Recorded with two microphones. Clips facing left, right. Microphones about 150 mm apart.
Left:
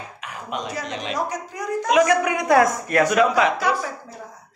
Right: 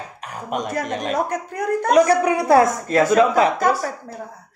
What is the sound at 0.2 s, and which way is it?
Speech, 45° right (ahead or behind).